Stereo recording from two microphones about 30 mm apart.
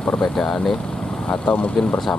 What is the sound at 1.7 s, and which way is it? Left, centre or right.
Speech, left.